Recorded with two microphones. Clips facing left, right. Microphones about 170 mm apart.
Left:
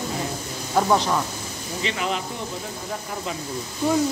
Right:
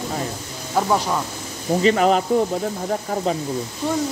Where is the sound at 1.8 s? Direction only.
45° right (ahead or behind).